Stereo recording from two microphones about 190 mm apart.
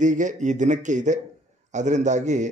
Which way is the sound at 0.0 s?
40° right (ahead or behind).